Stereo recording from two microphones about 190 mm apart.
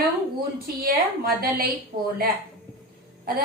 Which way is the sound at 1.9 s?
35° right (ahead or behind).